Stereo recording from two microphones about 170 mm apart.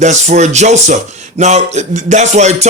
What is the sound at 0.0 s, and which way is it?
Speech, 45° right (ahead or behind).